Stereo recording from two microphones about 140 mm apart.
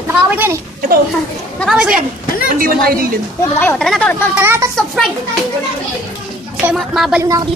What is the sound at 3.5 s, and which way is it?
Speech, 10° left (ahead or behind).